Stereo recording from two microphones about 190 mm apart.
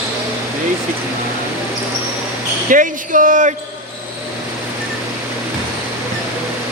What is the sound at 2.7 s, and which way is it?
Speech, 45° right (ahead or behind).